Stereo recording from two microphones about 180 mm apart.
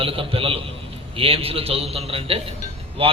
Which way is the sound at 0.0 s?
30° right (ahead or behind).